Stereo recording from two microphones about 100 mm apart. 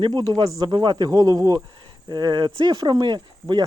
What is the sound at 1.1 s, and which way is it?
Speech, 40° right (ahead or behind).